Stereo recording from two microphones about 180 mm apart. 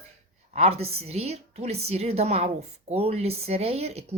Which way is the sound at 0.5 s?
35° right (ahead or behind).